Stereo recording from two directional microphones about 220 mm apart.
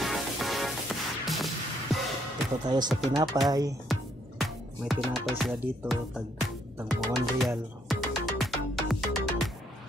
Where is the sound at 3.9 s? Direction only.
Centre (ahead or behind).